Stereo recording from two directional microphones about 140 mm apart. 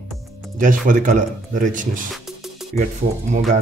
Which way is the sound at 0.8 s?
65° right (ahead or behind).